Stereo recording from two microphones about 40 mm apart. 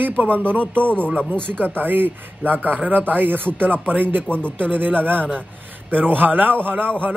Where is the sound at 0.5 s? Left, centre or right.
Right.